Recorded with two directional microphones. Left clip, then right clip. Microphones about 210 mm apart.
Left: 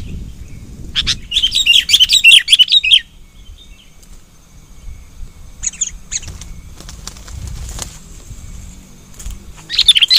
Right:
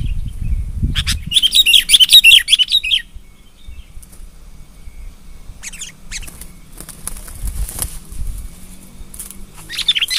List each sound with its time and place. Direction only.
0.9 s bird: 5° right (ahead or behind)
1.3 s chirp: 40° right (ahead or behind); by 3.1 s 10° right (ahead or behind)
5.6 s rodents: 20° right (ahead or behind)
6.8 s bird: 10° right (ahead or behind)
9.7 s chirp: centre (ahead or behind)